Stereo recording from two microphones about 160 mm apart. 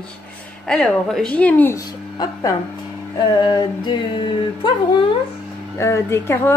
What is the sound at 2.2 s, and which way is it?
Speech, 25° left (ahead or behind).